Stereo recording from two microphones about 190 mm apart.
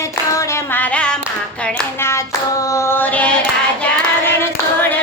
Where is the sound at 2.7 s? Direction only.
15° left (ahead or behind).